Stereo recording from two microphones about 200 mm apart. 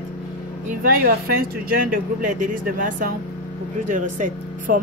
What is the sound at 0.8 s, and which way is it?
Speech, 45° right (ahead or behind).